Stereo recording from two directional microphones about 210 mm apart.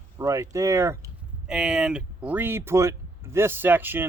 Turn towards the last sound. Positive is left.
turn(degrees=-10)  # may be behind; listen again after turning